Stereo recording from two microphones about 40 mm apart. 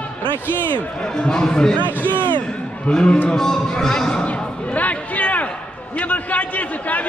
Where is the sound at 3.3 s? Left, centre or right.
Centre.